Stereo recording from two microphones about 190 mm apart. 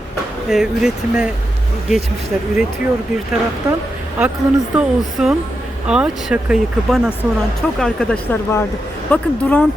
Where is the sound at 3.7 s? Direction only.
20° right (ahead or behind).